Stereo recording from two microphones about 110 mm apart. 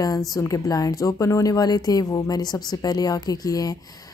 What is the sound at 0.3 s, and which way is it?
A woman's voice, 30° left (ahead or behind).